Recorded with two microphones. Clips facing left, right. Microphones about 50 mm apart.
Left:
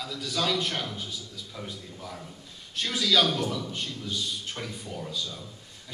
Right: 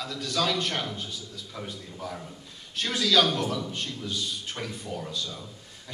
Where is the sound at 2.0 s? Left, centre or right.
Centre.